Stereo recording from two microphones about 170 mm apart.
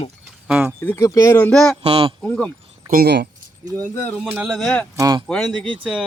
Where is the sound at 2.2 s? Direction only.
5° left (ahead or behind).